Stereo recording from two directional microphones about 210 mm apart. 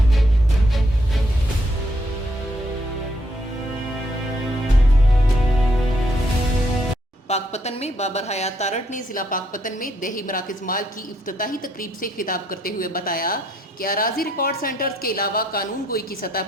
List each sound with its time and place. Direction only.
7.3 s a woman's voice: 30° left (ahead or behind)